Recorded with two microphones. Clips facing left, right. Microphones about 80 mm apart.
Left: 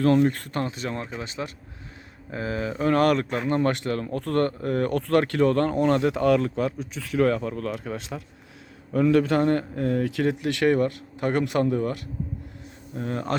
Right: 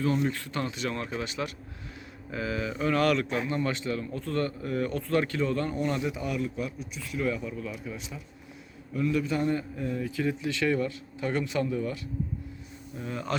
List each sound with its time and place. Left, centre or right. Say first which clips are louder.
0.0 s speech: left 8 dB; left
0.6 s a man's voice: left 2 dB; left
7.2 s speech: left 8 dB; left
8.9 s a man's voice: left 8 dB; left